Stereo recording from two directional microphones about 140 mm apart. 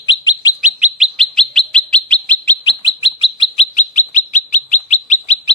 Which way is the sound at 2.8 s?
40° left (ahead or behind).